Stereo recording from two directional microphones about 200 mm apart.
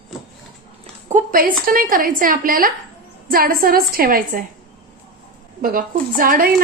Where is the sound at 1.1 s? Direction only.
45° right (ahead or behind).